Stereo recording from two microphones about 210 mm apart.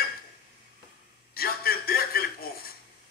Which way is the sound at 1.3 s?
45° left (ahead or behind).